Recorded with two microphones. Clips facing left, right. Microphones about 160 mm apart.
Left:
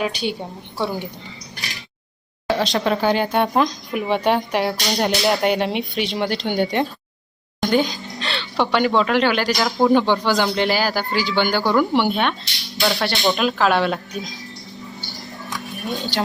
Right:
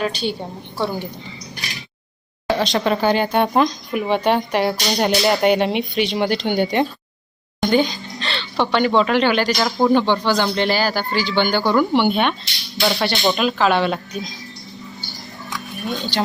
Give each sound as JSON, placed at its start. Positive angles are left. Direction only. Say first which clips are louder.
{"t": 0.0, "sound": "a woman's voice", "louder": "right 1 dB", "side_deg": 15}
{"t": 2.5, "sound": "speech", "louder": "right 1 dB", "side_deg": 0}
{"t": 15.7, "sound": "speech", "louder": "right 1 dB", "side_deg": 0}